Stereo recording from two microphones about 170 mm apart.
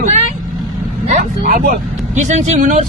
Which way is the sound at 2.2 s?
45° right (ahead or behind).